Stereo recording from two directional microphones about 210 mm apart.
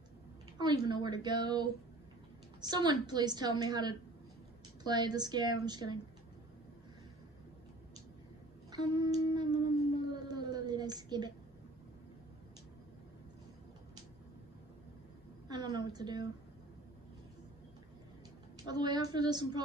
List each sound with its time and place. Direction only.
0.6 s a woman's voice: 20° right (ahead or behind)
8.9 s a woman's voice: 20° right (ahead or behind)
10.1 s a sound: 20° right (ahead or behind)
15.4 s a sound: 20° right (ahead or behind)
15.9 s a woman's voice: 20° right (ahead or behind)
18.7 s a woman's voice: 20° right (ahead or behind)